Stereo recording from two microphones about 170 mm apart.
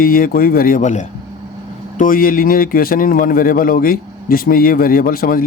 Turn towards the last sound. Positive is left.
turn(degrees=60)  # may be behind; listen again after turning